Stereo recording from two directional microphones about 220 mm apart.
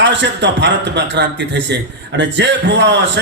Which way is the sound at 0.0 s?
55° right (ahead or behind).